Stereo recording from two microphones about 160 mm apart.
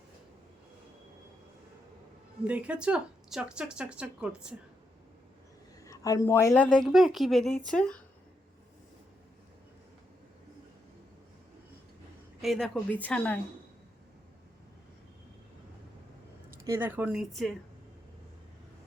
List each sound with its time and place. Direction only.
2.5 s speech: 10° right (ahead or behind)
5.8 s a woman's voice: 20° left (ahead or behind)
6.8 s speech: centre (ahead or behind)
12.4 s a woman's voice: centre (ahead or behind)
16.6 s speech: 15° right (ahead or behind)